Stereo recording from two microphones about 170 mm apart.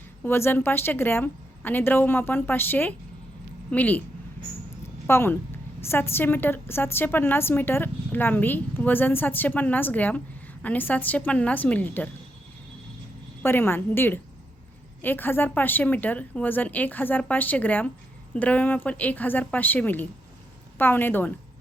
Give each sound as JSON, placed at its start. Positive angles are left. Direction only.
{"t": 0.3, "sound": "a woman's voice", "side_deg": 15}
{"t": 5.0, "sound": "a woman's voice", "side_deg": 15}
{"t": 13.4, "sound": "a woman's voice", "side_deg": 15}